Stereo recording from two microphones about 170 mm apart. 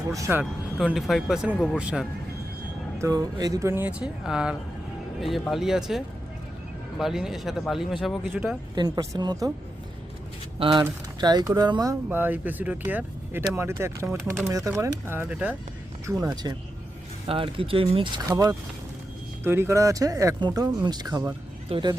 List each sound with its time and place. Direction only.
0.1 s speech: 15° right (ahead or behind)
3.0 s speech: 20° right (ahead or behind); by 6.0 s centre (ahead or behind)
7.0 s speech: 5° right (ahead or behind)
8.7 s speech: 25° right (ahead or behind)
10.6 s speech: 30° right (ahead or behind)
12.0 s speech: 10° right (ahead or behind)
16.0 s speech: 20° right (ahead or behind)
18.3 s speech: 20° right (ahead or behind)